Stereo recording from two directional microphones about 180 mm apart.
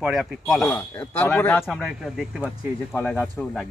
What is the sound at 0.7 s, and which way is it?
Speech, 10° left (ahead or behind).